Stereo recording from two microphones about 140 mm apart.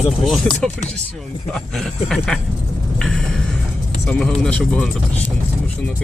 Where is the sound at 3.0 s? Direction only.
5° left (ahead or behind).